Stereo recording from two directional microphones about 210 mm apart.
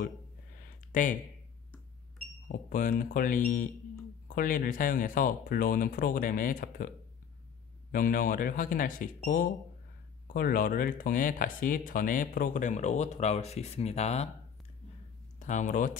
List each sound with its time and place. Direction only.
2.4 s speech: 40° left (ahead or behind)
7.9 s speech: 40° left (ahead or behind)
15.3 s speech: 35° left (ahead or behind)